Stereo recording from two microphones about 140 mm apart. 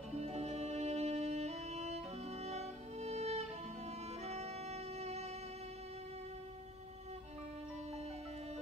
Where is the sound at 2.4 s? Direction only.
50° right (ahead or behind).